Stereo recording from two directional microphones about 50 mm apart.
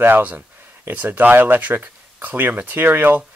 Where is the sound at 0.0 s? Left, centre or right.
Right.